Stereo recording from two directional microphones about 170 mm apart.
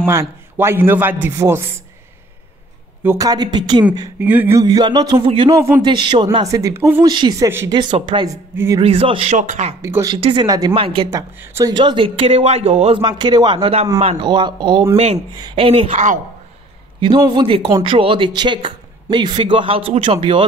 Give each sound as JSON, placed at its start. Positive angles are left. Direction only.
{"t": 0.0, "sound": "speech", "side_deg": -15}
{"t": 3.0, "sound": "speech", "side_deg": -15}
{"t": 3.5, "sound": "speech", "side_deg": -25}
{"t": 4.2, "sound": "speech", "side_deg": -10}
{"t": 5.5, "sound": "speech", "side_deg": -20}
{"t": 8.8, "sound": "a man's voice", "side_deg": -30}
{"t": 9.8, "sound": "speech", "side_deg": -15}
{"t": 10.1, "sound": "speech", "side_deg": -30}
{"t": 11.1, "sound": "a man's voice", "side_deg": -15}
{"t": 17.3, "sound": "a man's voice", "side_deg": -30}